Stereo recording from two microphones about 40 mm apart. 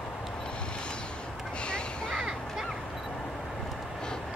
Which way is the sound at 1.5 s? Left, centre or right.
Left.